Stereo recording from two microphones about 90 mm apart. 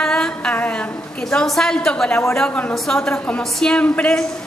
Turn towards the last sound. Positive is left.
turn(degrees=10)  # may be behind; listen again after turning